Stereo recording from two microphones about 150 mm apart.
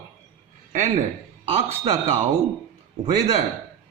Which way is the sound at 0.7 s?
50° right (ahead or behind).